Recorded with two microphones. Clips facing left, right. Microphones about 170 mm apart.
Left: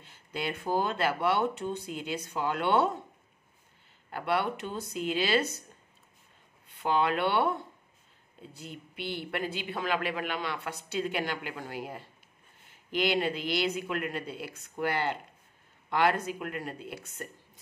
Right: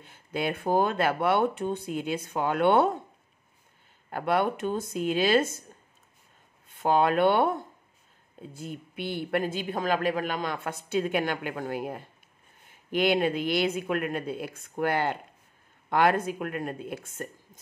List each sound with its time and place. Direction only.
0.0 s a woman's voice: 50° right (ahead or behind)
4.1 s a woman's voice: 50° right (ahead or behind)
6.7 s a woman's voice: 45° right (ahead or behind)